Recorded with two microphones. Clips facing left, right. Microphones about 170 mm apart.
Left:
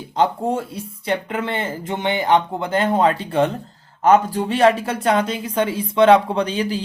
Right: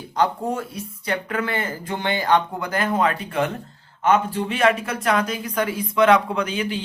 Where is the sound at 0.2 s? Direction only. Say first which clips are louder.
Left 3 dB; 25° left (ahead or behind).